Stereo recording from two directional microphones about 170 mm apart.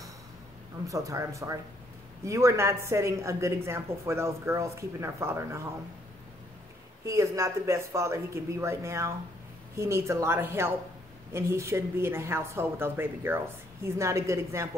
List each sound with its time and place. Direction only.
0.8 s speech: 20° right (ahead or behind)
7.1 s speech: 20° right (ahead or behind)